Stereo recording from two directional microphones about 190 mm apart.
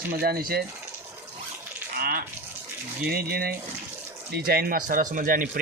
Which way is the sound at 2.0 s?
50° right (ahead or behind).